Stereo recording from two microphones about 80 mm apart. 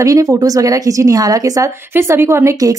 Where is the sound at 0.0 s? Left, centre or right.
Right.